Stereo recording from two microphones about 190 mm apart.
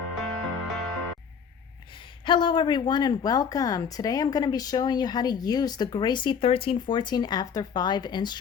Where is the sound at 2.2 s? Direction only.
25° left (ahead or behind).